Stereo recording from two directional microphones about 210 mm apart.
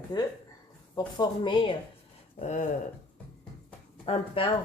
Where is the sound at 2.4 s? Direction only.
35° left (ahead or behind).